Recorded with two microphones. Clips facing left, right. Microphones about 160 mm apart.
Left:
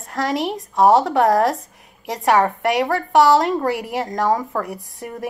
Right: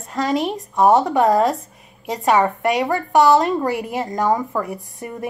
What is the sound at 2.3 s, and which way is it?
Speech, 5° right (ahead or behind).